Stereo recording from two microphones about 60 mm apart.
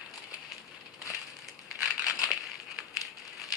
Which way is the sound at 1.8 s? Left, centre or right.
Centre.